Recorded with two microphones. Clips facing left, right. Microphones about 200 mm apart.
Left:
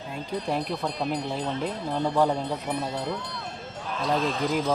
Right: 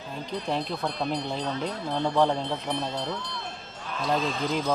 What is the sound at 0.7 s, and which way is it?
Speech, centre (ahead or behind).